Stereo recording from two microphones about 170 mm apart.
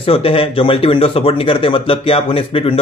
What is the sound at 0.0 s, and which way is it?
Speech, 35° left (ahead or behind).